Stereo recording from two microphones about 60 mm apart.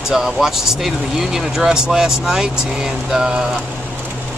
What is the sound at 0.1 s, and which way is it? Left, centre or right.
Speech, centre.